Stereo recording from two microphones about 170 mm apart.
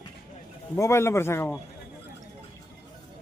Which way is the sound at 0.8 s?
15° left (ahead or behind).